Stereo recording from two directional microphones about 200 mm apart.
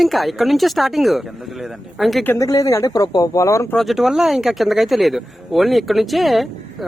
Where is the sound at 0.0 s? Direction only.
Centre (ahead or behind).